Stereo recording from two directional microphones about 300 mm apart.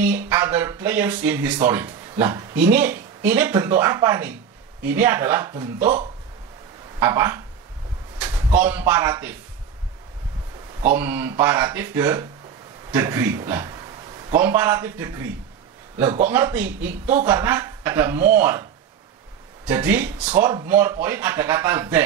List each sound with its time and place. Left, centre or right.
0.0 s speech: centre
5.8 s speech: right
7.0 s speech: centre
8.5 s speech: centre
10.9 s a man's voice: centre